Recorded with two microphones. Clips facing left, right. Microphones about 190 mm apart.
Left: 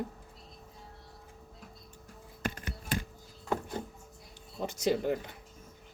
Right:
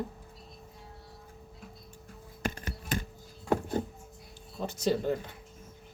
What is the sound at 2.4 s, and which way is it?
Music, 45° right (ahead or behind).